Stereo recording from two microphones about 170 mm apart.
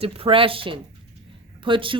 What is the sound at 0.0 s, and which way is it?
A woman's voice, 35° right (ahead or behind).